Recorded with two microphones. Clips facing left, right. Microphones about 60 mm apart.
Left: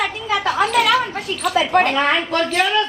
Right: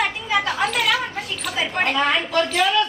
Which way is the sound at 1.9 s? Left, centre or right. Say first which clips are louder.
Left 2 dB; left.